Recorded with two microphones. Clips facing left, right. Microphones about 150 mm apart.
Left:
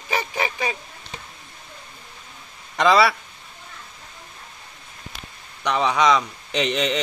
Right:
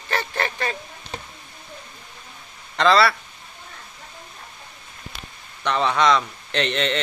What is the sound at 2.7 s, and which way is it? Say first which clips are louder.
Speech: even; 10° left (ahead or behind).